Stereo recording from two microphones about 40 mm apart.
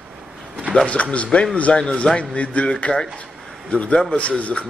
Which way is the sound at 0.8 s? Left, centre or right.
Left.